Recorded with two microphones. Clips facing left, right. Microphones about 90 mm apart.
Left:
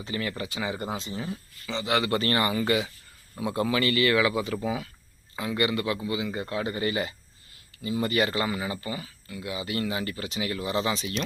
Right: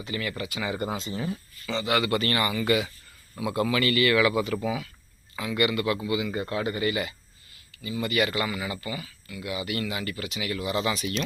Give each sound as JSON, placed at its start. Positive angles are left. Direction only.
{"t": 0.0, "sound": "a man's voice", "side_deg": 30}
{"t": 1.1, "sound": "speech", "side_deg": 10}
{"t": 1.7, "sound": "a man's voice", "side_deg": 25}
{"t": 5.5, "sound": "a man's voice", "side_deg": 25}